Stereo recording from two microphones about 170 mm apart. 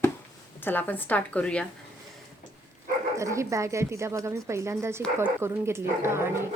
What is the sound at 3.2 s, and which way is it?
Speech, 15° right (ahead or behind).